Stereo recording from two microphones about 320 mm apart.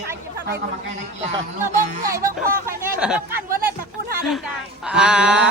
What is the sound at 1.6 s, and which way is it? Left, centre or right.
Speech, centre.